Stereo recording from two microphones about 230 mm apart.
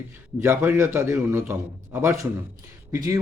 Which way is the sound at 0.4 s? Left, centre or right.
Centre.